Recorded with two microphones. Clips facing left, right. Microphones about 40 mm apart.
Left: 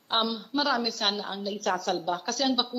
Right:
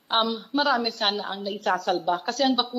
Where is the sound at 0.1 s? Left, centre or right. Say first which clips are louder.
Right 3 dB; centre.